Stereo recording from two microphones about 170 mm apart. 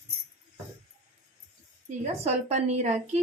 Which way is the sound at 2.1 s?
40° right (ahead or behind).